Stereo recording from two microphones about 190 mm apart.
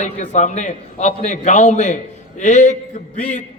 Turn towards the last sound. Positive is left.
turn(degrees=40)  # may be behind; listen again after turning